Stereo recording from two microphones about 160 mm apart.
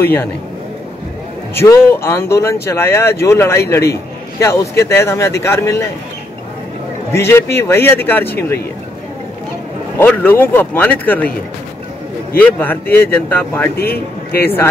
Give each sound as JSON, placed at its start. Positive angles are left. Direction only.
{"t": 0.0, "sound": "speech", "side_deg": 15}
{"t": 1.5, "sound": "speech", "side_deg": 15}
{"t": 7.1, "sound": "speech", "side_deg": 15}
{"t": 9.9, "sound": "speech", "side_deg": 15}
{"t": 12.4, "sound": "speech", "side_deg": 10}
{"t": 13.7, "sound": "a man's voice", "side_deg": 75}
{"t": 14.4, "sound": "speech", "side_deg": 15}